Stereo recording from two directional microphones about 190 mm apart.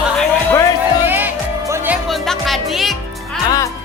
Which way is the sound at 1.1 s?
10° right (ahead or behind).